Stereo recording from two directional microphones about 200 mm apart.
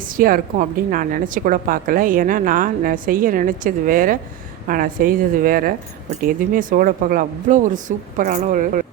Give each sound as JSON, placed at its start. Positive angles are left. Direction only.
{"t": 0.2, "sound": "a woman's voice", "side_deg": -45}